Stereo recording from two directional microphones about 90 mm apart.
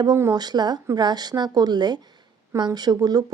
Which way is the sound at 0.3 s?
50° right (ahead or behind).